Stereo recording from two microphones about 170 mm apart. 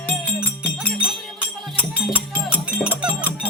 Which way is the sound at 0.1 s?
10° left (ahead or behind).